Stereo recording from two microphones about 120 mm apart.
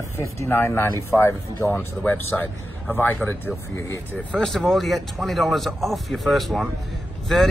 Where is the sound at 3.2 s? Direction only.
Centre (ahead or behind).